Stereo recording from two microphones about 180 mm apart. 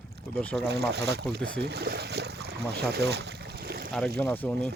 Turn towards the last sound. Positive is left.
turn(degrees=10)  # may be behind; listen again after turning